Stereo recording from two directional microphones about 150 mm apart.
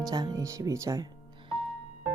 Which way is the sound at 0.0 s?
25° right (ahead or behind).